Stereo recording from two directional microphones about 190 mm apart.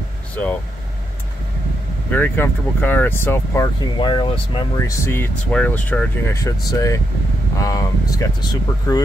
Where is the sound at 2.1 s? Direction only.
10° left (ahead or behind).